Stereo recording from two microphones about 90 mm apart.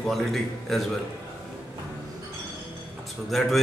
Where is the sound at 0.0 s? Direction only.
Centre (ahead or behind).